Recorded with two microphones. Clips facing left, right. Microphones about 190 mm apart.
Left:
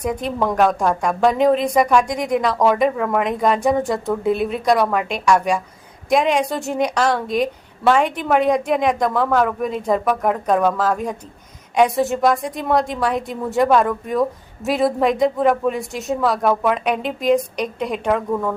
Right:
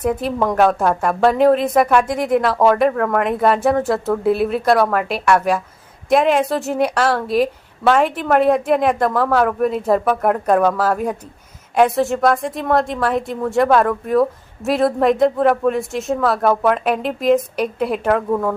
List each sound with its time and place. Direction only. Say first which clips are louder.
0.0 s a woman's voice: right 2 dB; 5° right (ahead or behind)